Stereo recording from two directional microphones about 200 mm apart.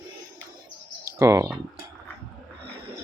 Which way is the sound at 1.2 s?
15° right (ahead or behind).